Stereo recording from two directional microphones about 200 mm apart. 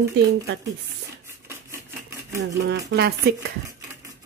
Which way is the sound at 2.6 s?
55° right (ahead or behind).